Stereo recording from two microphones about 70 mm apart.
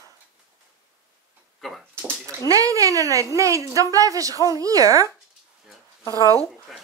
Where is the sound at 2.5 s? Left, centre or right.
Right.